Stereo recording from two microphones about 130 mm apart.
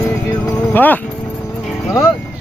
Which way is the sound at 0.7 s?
15° left (ahead or behind).